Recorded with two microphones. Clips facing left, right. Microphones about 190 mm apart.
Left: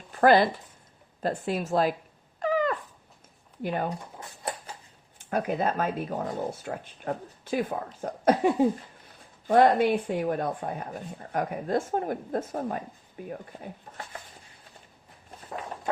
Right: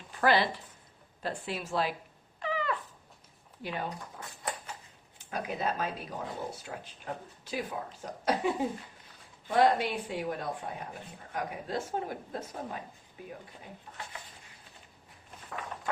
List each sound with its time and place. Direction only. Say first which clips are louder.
0.2 s speech: left 7 dB; 45° left (ahead or behind)
2.4 s dog: left 7 dB; 45° left (ahead or behind)
3.6 s speech: left 7 dB; 50° left (ahead or behind)
4.2 s a sound: left 3 dB; 25° left (ahead or behind)
5.1 s speech: left 8 dB; 50° left (ahead or behind)
9.5 s speech: left 6 dB; 50° left (ahead or behind)
15.4 s walk: left 4 dB; 30° left (ahead or behind)